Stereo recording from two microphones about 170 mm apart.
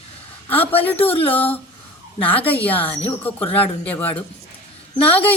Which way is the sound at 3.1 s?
10° left (ahead or behind).